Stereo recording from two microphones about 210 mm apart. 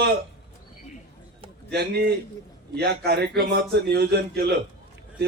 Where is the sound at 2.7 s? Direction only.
50° right (ahead or behind).